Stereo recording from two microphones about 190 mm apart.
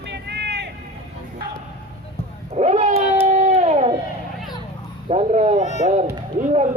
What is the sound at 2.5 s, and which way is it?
Cat, 35° right (ahead or behind).